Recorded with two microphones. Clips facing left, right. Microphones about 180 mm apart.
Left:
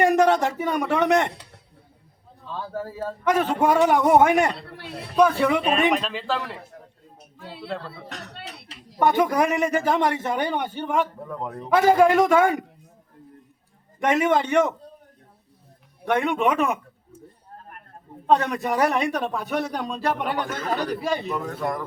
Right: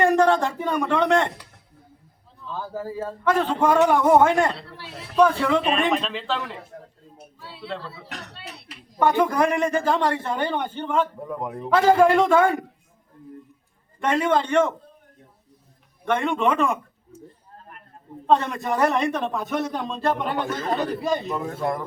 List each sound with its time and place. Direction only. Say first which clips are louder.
0.0 s a man's voice: even; 10° left (ahead or behind)
2.5 s speech: right 1 dB; centre (ahead or behind)
3.2 s a man's voice: even; 15° left (ahead or behind)
4.8 s speech: left 3 dB; 60° left (ahead or behind)
5.1 s speech: even; 15° left (ahead or behind)
7.3 s speech: left 2 dB; 55° left (ahead or behind)
9.0 s a man's voice: even; 15° left (ahead or behind)
11.3 s a man's voice: right 2 dB; 10° right (ahead or behind)
11.7 s a man's voice: even; 15° left (ahead or behind)
14.0 s a man's voice: left 1 dB; 15° left (ahead or behind)
16.0 s a man's voice: even; 10° left (ahead or behind)
18.4 s a man's voice: even; 10° left (ahead or behind)
20.5 s speech: right 1 dB; 30° right (ahead or behind)